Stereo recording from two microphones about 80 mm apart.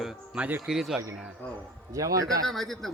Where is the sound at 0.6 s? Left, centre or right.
Centre.